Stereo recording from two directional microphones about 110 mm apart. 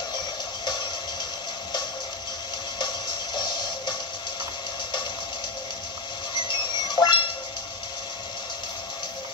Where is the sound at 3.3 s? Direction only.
45° left (ahead or behind).